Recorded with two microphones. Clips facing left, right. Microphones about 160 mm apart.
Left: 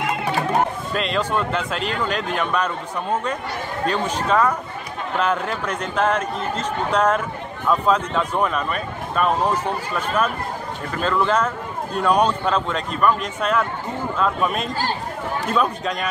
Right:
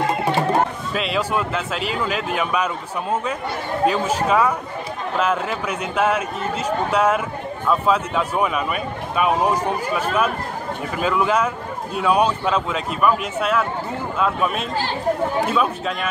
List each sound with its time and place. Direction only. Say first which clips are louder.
0.0 s music: right 3 dB; 30° right (ahead or behind)
0.9 s speech: even; 5° right (ahead or behind)